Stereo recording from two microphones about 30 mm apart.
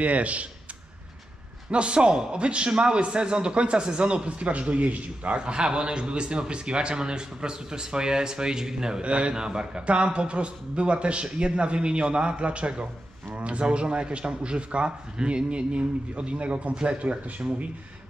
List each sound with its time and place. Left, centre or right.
0.0 s speech: right
1.7 s speech: right
2.0 s a man's voice: right
2.3 s speech: right
5.4 s a man's voice: right
9.0 s speech: right
9.3 s a man's voice: right
9.8 s speech: right